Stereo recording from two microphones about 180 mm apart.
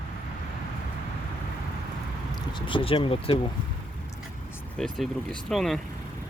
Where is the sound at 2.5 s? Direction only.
30° left (ahead or behind).